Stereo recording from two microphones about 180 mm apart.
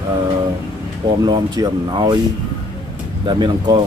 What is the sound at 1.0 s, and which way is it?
Speech, 25° right (ahead or behind).